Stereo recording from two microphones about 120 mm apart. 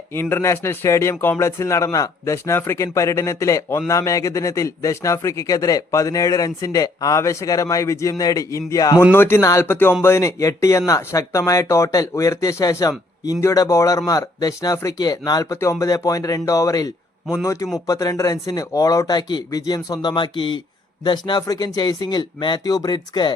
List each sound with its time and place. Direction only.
0.1 s speech: 20° left (ahead or behind)
9.1 s speech: 20° left (ahead or behind); by 23.3 s 35° left (ahead or behind)